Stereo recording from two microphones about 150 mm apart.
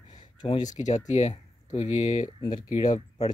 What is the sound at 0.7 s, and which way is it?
Speech, 55° left (ahead or behind).